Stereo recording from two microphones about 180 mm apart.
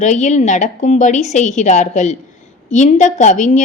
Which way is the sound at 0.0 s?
40° left (ahead or behind).